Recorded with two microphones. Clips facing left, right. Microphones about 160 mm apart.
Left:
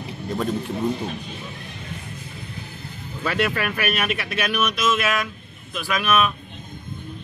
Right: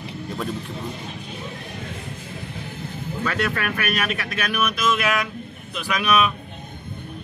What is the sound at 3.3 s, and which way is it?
Speech, 5° left (ahead or behind).